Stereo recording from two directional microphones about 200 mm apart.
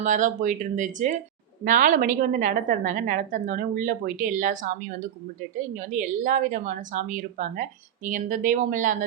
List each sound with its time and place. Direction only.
0.0 s a woman's voice: 40° right (ahead or behind)